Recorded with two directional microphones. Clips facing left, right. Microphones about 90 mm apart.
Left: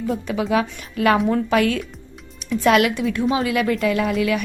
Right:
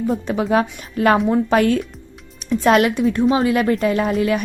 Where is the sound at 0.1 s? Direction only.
35° right (ahead or behind).